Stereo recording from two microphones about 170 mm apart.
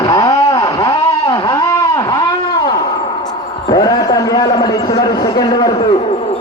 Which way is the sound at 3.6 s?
20° left (ahead or behind).